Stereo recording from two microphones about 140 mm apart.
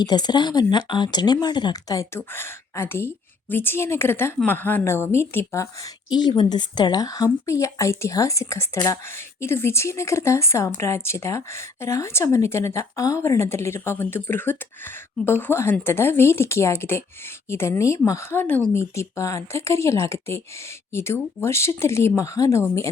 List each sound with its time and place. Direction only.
0.0 s a woman's voice: 30° left (ahead or behind)
6.1 s speech: 30° left (ahead or behind)